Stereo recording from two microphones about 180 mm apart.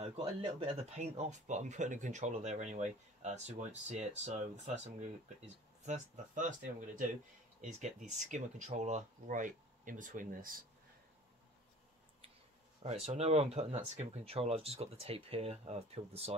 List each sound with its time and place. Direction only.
0.0 s speech: 30° right (ahead or behind)
5.9 s speech: 45° right (ahead or behind)
12.8 s speech: 35° right (ahead or behind)